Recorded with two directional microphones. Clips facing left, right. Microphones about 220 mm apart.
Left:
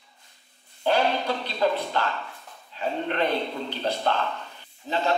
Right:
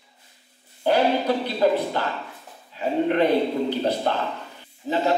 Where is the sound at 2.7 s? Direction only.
15° right (ahead or behind).